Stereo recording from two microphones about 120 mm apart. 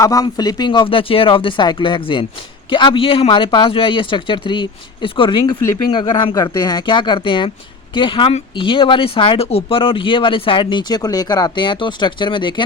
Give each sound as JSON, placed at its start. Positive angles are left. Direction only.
{"t": 0.0, "sound": "speech", "side_deg": 30}